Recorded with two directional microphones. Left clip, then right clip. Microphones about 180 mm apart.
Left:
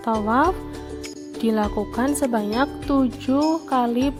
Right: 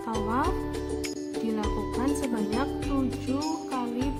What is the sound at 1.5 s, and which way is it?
Speech, 50° left (ahead or behind).